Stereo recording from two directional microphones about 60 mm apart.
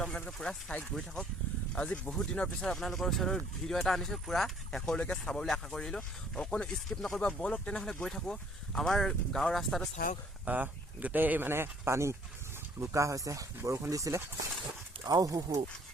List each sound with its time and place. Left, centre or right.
0.3 s speech: centre
2.6 s speech: centre
10.4 s speech: right
15.0 s speech: right